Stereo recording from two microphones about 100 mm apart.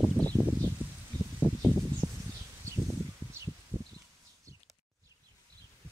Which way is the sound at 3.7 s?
20° left (ahead or behind).